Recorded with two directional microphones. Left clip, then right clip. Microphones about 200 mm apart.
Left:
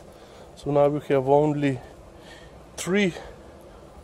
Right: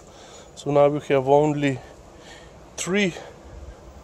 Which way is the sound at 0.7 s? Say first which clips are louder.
Right 2 dB; 10° right (ahead or behind).